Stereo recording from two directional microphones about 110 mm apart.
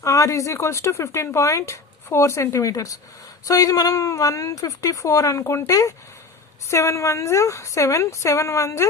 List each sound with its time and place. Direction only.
0.0 s a woman's voice: 30° left (ahead or behind)